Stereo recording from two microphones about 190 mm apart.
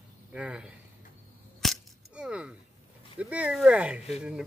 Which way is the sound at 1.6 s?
Centre (ahead or behind).